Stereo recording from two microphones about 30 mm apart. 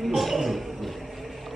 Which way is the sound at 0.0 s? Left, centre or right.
Centre.